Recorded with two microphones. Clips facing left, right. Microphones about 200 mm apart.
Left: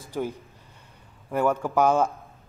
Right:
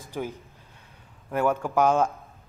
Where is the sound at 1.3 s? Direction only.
10° right (ahead or behind).